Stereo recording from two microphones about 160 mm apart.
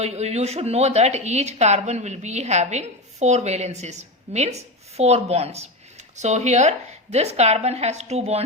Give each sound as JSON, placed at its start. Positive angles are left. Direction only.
{"t": 0.0, "sound": "speech", "side_deg": -40}